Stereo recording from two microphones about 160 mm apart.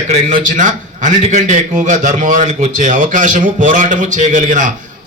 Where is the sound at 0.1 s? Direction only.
55° right (ahead or behind).